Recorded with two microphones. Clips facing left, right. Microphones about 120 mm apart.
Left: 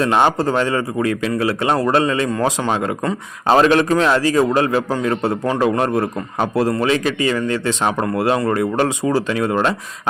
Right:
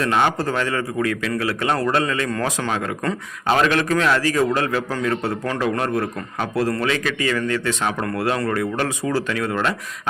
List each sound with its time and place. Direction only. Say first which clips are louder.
0.0 s a man's voice: left 4 dB; 30° left (ahead or behind)
3.5 s a man's voice: left 5 dB; 30° left (ahead or behind)